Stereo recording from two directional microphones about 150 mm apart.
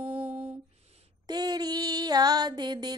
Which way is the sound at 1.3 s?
25° right (ahead or behind).